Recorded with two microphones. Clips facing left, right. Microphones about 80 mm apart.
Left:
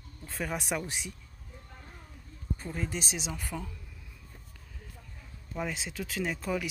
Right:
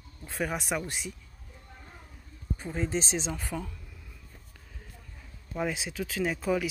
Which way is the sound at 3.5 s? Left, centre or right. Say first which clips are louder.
Right 2 dB; centre.